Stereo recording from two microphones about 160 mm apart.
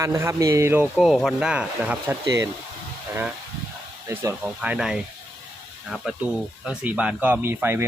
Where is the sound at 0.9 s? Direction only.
Centre (ahead or behind).